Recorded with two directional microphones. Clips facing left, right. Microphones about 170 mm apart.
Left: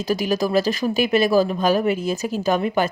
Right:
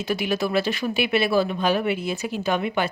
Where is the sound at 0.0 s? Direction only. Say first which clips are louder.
Left 3 dB; 40° left (ahead or behind).